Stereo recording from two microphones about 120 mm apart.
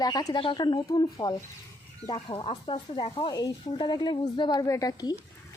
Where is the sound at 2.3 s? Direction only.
45° left (ahead or behind); by 5.1 s 30° left (ahead or behind).